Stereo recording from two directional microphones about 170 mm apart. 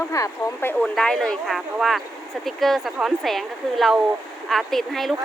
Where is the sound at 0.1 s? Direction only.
15° left (ahead or behind).